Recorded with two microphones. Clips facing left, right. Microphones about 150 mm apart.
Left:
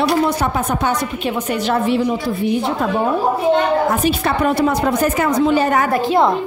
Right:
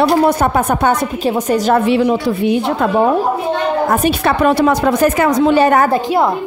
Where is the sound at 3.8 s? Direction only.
65° right (ahead or behind).